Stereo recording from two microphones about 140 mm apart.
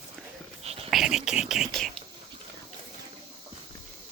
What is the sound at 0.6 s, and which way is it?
Whispering, 45° right (ahead or behind).